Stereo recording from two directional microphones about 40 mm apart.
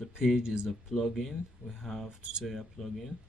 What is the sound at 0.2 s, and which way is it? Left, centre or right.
Speech, centre.